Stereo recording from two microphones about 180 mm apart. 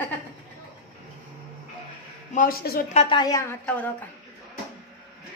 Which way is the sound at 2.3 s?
55° left (ahead or behind).